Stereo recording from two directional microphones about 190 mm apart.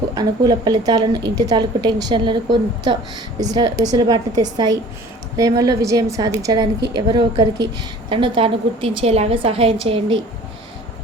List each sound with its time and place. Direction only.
0.1 s a woman's voice: 20° right (ahead or behind)